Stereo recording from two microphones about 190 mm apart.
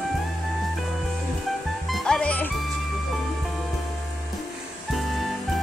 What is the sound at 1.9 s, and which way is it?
Speech, 5° left (ahead or behind).